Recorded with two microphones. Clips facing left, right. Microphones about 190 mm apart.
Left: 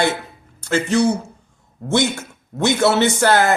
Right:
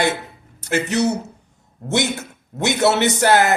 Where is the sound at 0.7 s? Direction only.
20° right (ahead or behind).